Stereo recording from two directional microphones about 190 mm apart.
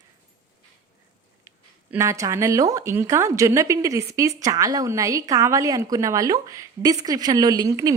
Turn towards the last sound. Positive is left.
turn(degrees=-20)  # may be behind; listen again after turning